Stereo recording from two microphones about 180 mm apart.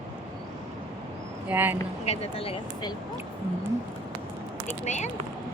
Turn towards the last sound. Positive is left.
turn(degrees=40)  # may be behind; listen again after turning